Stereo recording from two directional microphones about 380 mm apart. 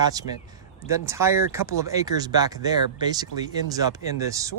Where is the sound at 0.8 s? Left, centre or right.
Centre.